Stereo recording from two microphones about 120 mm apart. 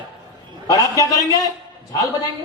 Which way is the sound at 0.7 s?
30° left (ahead or behind).